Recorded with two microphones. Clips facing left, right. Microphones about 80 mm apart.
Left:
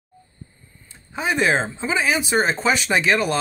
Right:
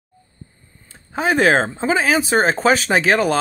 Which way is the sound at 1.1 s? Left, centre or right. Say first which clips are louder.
Right 5 dB; right.